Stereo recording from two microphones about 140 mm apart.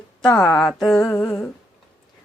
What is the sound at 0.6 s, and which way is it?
Mantra, centre (ahead or behind).